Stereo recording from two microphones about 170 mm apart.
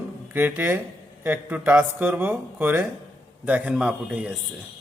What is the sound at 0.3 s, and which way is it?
Speech, 10° right (ahead or behind).